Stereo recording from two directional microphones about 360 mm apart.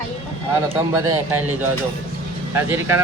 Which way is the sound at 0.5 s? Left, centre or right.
Centre.